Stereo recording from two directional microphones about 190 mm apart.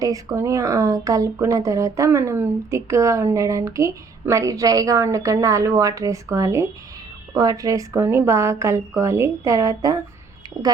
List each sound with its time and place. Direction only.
0.0 s speech: 15° right (ahead or behind)